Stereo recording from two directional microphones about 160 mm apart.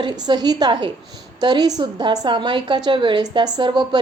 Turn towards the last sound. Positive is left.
turn(degrees=-30)  # may be behind; listen again after turning